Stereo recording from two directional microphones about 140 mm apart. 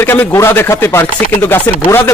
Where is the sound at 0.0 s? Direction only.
15° left (ahead or behind).